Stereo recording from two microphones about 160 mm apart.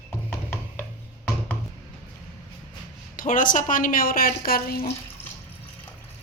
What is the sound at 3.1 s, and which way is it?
A woman's voice, 55° left (ahead or behind).